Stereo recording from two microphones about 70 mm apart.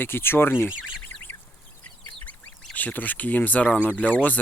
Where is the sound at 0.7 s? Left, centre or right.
Centre.